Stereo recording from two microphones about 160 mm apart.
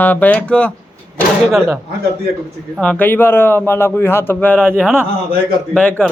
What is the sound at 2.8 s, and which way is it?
A man's voice, 10° left (ahead or behind).